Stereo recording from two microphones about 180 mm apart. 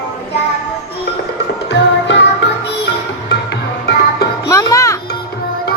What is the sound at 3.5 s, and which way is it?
Music, 65° left (ahead or behind).